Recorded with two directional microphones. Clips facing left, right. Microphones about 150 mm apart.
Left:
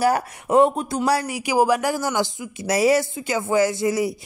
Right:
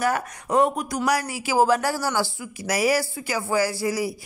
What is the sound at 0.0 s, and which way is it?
Speech, 30° left (ahead or behind).